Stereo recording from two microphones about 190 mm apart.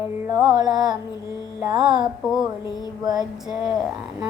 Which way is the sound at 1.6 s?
20° right (ahead or behind).